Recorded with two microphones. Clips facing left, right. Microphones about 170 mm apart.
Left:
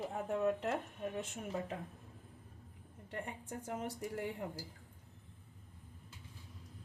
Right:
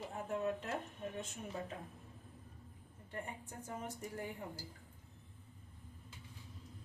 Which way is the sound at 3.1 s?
80° left.